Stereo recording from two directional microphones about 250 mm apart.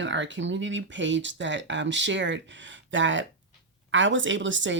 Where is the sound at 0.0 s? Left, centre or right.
Right.